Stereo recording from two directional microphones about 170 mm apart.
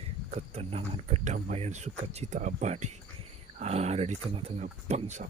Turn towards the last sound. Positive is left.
turn(degrees=-40)  # may be behind; listen again after turning